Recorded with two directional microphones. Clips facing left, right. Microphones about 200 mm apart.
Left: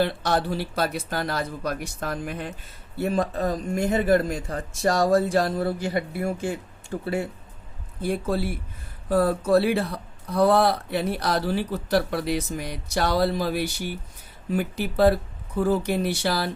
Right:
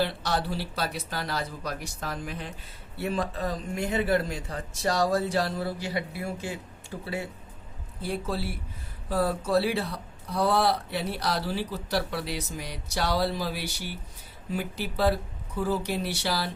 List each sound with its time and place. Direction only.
0.0 s speech: 50° left (ahead or behind)